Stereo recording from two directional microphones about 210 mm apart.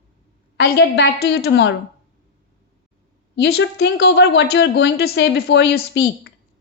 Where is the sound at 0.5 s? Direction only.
50° left (ahead or behind).